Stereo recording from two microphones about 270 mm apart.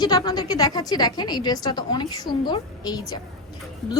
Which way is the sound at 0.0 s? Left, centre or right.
Centre.